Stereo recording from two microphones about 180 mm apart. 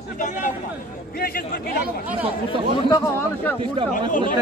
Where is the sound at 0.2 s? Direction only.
45° left (ahead or behind).